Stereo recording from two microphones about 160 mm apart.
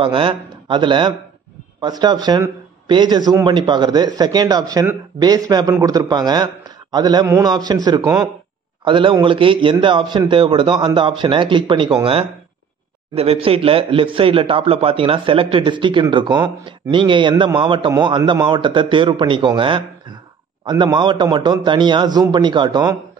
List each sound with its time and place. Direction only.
0.0 s a man's voice: 35° right (ahead or behind)